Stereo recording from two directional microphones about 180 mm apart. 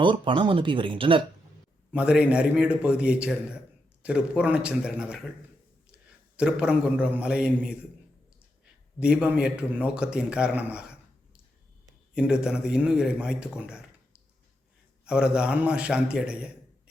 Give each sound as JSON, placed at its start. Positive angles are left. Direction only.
{"t": 0.0, "sound": "speech", "side_deg": -25}
{"t": 1.9, "sound": "a man's voice", "side_deg": -5}
{"t": 12.1, "sound": "a man's voice", "side_deg": -5}